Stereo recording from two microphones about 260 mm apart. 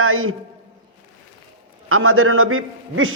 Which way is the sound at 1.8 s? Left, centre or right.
Right.